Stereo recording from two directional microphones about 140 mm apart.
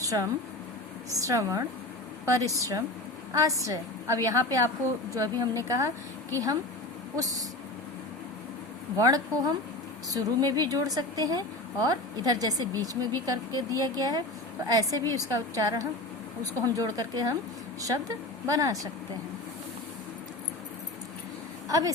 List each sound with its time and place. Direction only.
0.0 s a sound: 25° right (ahead or behind)
1.2 s a woman's voice: 25° right (ahead or behind)
9.0 s a woman's voice: 25° right (ahead or behind)
21.7 s speech: 25° right (ahead or behind)